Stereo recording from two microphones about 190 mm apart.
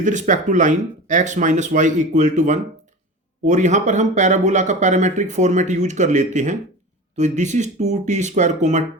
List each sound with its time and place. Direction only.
0.0 s speech: 40° right (ahead or behind)